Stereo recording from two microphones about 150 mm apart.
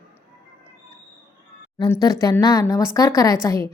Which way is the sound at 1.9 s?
25° left (ahead or behind).